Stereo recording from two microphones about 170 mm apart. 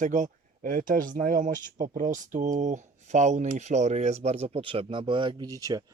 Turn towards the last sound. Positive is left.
turn(degrees=-20)  # may be behind; listen again after turning